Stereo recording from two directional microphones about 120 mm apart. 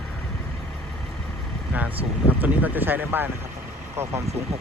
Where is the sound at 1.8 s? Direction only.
15° right (ahead or behind).